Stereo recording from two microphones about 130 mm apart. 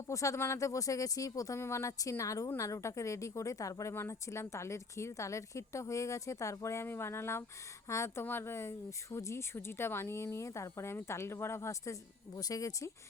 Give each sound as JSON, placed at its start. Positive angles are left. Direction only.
{"t": 0.1, "sound": "speech", "side_deg": 25}